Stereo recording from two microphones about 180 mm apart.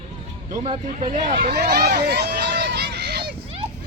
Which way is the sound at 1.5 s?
60° right (ahead or behind).